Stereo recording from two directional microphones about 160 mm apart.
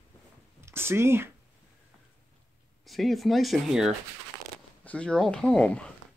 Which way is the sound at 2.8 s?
Centre (ahead or behind).